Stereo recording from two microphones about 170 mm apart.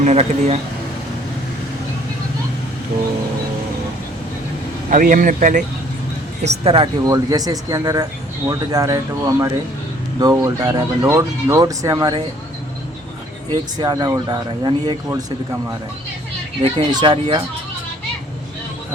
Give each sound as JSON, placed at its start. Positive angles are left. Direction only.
{"t": 0.0, "sound": "speech", "side_deg": -40}
{"t": 4.9, "sound": "speech", "side_deg": -50}
{"t": 6.4, "sound": "speech", "side_deg": -35}
{"t": 7.1, "sound": "speech", "side_deg": -20}
{"t": 13.5, "sound": "speech", "side_deg": -20}
{"t": 16.6, "sound": "speech", "side_deg": -25}